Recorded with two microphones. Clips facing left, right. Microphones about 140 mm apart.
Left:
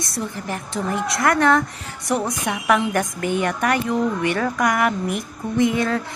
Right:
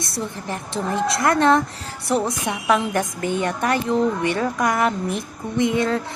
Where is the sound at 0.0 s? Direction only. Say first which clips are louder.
Even; 25° right (ahead or behind).